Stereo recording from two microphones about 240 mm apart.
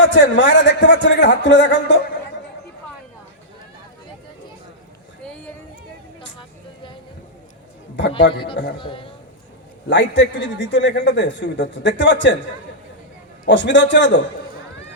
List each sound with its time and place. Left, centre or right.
0.0 s a man's voice: left
5.2 s a sound: centre
8.3 s a man's voice: left
9.9 s a man's voice: left
13.4 s a man's voice: left